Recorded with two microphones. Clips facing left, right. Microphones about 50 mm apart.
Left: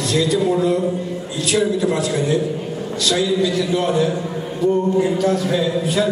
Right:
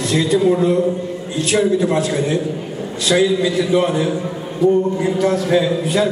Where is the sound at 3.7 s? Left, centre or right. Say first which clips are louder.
Right 1 dB; right.